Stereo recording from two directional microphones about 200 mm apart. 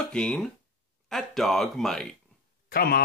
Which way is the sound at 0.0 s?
5° left (ahead or behind).